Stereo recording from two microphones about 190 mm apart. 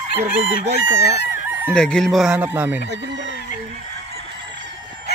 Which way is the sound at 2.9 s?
65° right (ahead or behind).